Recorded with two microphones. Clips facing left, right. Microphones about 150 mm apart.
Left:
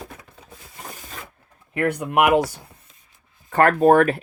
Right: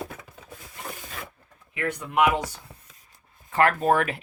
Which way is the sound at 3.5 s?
45° left (ahead or behind).